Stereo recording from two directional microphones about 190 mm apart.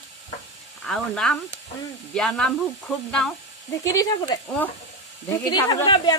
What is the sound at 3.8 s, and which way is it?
Speech, 20° left (ahead or behind).